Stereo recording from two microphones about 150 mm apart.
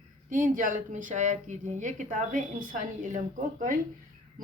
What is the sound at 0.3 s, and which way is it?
Speech, 60° right (ahead or behind).